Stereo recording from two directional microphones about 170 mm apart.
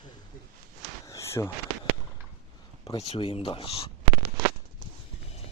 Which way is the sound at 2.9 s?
35° left (ahead or behind).